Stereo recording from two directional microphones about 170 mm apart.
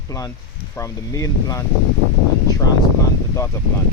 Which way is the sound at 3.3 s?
15° left (ahead or behind).